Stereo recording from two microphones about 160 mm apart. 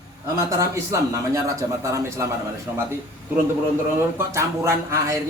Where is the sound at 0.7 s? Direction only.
20° right (ahead or behind).